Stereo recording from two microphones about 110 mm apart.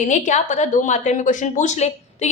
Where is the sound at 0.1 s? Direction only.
90° left.